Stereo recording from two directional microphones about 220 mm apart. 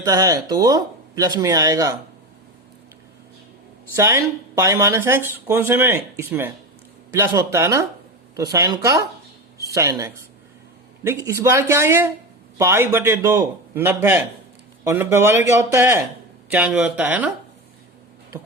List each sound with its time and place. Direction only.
0.0 s speech: 15° right (ahead or behind)
3.9 s speech: 10° right (ahead or behind)